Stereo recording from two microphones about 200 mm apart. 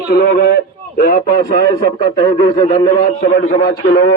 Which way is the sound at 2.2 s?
25° left (ahead or behind).